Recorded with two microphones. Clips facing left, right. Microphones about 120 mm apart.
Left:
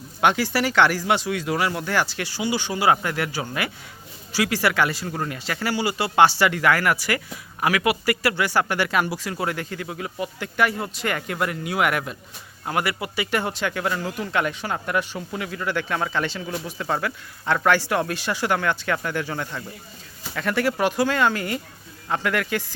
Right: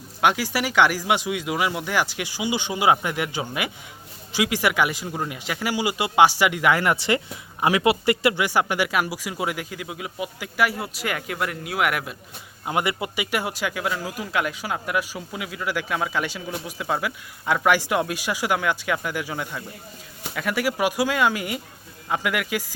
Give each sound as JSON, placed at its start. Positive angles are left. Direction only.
{"t": 0.2, "sound": "speech", "side_deg": -10}
{"t": 12.6, "sound": "speech", "side_deg": -20}
{"t": 13.3, "sound": "speech", "side_deg": -10}